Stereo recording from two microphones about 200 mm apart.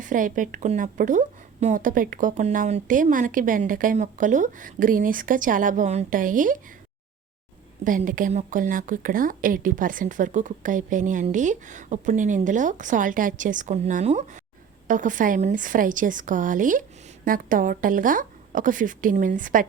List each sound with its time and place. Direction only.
0.0 s a woman's voice: 40° right (ahead or behind)
7.9 s a woman's voice: 40° right (ahead or behind)